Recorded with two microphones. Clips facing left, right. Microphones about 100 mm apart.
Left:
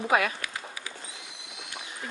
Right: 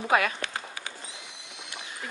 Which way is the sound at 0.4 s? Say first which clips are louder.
Right 2 dB; 30° right (ahead or behind).